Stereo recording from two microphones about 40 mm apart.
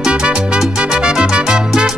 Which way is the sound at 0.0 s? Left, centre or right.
Right.